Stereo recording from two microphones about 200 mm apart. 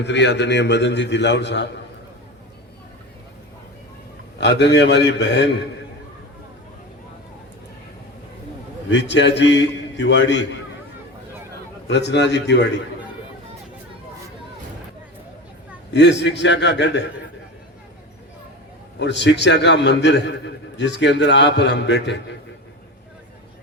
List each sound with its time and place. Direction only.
0.0 s a man's voice: 60° left (ahead or behind)
4.4 s a man's voice: 60° left (ahead or behind)
8.9 s a man's voice: 60° left (ahead or behind)
11.9 s a man's voice: 60° left (ahead or behind)
15.9 s a man's voice: 60° left (ahead or behind)
18.9 s a man's voice: 60° left (ahead or behind)